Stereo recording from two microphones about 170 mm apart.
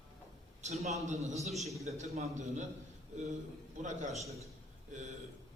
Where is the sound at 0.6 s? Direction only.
40° right (ahead or behind).